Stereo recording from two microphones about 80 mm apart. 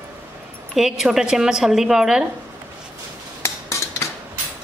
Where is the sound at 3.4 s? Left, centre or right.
Left.